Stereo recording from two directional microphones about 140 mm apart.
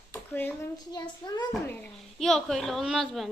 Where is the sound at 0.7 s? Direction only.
30° left (ahead or behind).